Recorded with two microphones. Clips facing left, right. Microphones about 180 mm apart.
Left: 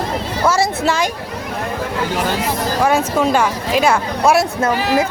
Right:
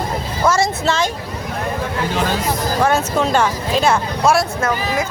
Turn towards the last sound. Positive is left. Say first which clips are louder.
# left 1 dB
turn(degrees=10)  # may be behind; listen again after turning